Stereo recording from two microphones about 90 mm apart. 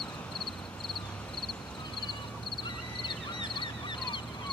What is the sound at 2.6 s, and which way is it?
Duck, 65° left (ahead or behind).